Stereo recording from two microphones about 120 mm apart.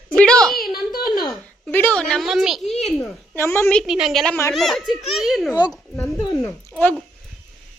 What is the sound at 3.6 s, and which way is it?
A woman's voice, centre (ahead or behind).